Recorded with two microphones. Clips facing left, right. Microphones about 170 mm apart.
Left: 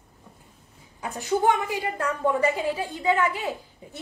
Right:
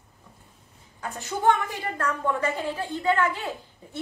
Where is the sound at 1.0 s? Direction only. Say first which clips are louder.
Left 5 dB; 15° left (ahead or behind).